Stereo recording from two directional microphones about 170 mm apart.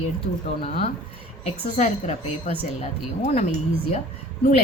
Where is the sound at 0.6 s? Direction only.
40° left (ahead or behind).